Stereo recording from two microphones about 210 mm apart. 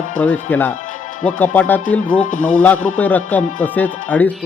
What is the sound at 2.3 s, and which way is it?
Speech, 40° left (ahead or behind).